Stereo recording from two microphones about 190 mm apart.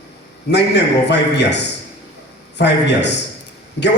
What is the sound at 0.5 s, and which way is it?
A man's voice, 65° left (ahead or behind).